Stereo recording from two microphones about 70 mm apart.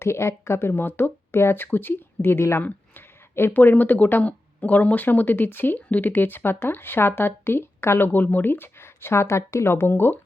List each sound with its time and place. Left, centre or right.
0.0 s speech: left